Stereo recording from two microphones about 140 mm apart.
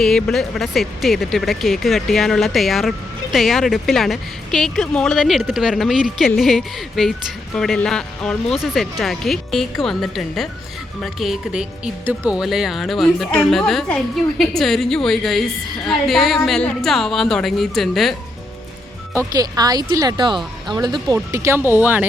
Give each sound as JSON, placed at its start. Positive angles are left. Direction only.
{"t": 0.0, "sound": "speech", "side_deg": 5}
{"t": 19.1, "sound": "speech", "side_deg": -25}